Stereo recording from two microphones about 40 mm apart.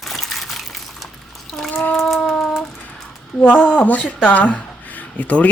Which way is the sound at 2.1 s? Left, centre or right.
Centre.